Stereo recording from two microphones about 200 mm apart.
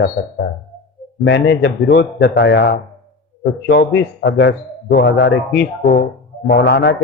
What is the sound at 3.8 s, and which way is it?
A man's voice, 55° left (ahead or behind).